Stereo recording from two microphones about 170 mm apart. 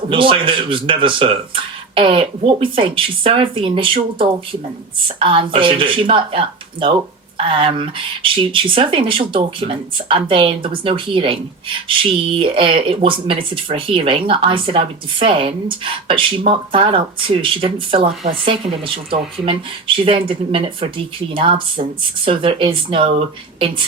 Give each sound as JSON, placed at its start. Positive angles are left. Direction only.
{"t": 0.1, "sound": "speech", "side_deg": -30}
{"t": 20.1, "sound": "speech", "side_deg": -30}